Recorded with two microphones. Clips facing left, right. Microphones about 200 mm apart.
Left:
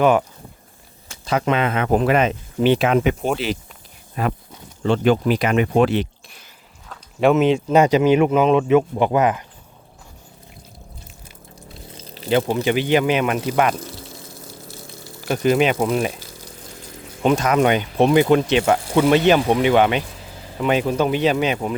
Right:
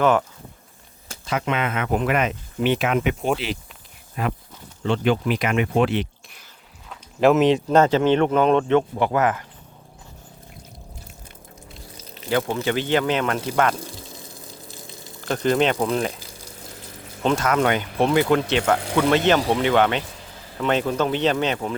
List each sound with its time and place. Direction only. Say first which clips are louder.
0.0 s speech: left 3 dB; 15° left (ahead or behind)
1.3 s speech: left 4 dB; 35° left (ahead or behind)
7.2 s speech: left 1 dB; centre (ahead or behind)
7.8 s speech: left 4 dB; 10° left (ahead or behind)
11.9 s a sound: left 6 dB; 30° left (ahead or behind)
12.3 s speech: left 4 dB; 20° left (ahead or behind)
13.9 s water: left 2 dB; 15° right (ahead or behind)
15.2 s speech: left 3 dB; 10° left (ahead or behind)
17.2 s speech: left 3 dB; 15° left (ahead or behind)